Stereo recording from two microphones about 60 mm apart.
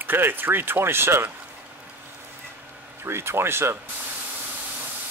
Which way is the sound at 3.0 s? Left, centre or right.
Right.